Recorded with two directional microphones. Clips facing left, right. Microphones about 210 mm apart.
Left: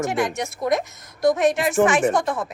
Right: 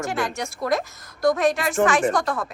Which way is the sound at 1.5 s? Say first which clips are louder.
Left 2 dB; 20° left (ahead or behind).